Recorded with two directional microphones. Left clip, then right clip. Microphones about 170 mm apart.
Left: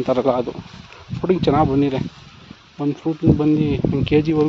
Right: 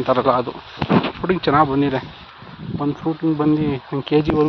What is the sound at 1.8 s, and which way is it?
Speech, 35° left (ahead or behind).